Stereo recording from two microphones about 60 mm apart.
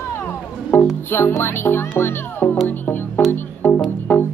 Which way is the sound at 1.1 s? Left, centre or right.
Left.